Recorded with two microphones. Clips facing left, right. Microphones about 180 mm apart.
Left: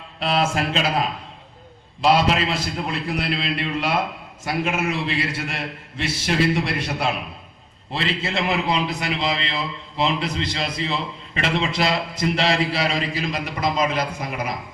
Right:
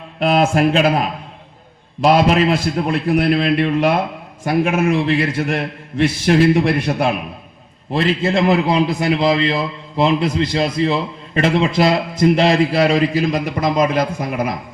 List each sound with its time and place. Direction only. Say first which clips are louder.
0.2 s a man's voice: right 7 dB; 50° right (ahead or behind)